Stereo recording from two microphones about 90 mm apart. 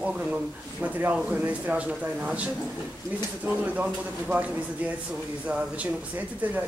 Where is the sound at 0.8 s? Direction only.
15° right (ahead or behind).